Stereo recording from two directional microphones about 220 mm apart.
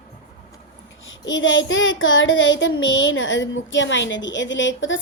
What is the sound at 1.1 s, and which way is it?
Child singing, 60° left (ahead or behind).